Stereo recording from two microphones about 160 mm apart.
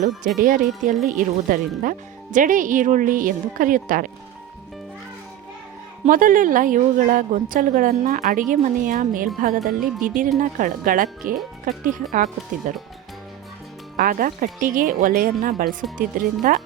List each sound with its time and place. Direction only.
0.3 s a woman's voice: 55° right (ahead or behind)
6.1 s a woman's voice: 60° right (ahead or behind)
13.9 s a woman's voice: 65° right (ahead or behind)